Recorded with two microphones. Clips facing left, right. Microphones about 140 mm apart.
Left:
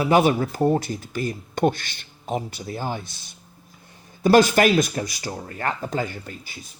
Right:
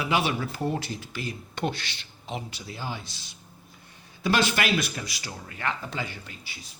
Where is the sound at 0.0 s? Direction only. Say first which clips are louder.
Left 8 dB; 45° left (ahead or behind).